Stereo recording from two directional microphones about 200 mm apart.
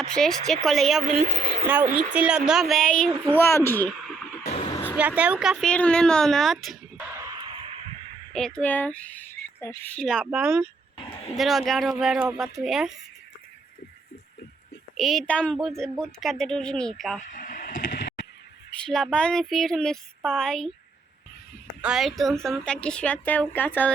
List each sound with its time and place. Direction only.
0.1 s speech: centre (ahead or behind)
1.1 s speech: 45° right (ahead or behind)
1.6 s speech: 10° right (ahead or behind)
4.4 s a sound: 30° left (ahead or behind)
4.7 s a sound: 10° left (ahead or behind)
4.9 s speech: 5° right (ahead or behind)
7.1 s a sound: 15° right (ahead or behind)
8.3 s speech: 5° left (ahead or behind)
14.9 s speech: centre (ahead or behind)
17.3 s vehicle: 45° left (ahead or behind)
18.9 s speech: centre (ahead or behind)
21.8 s speech: 5° right (ahead or behind)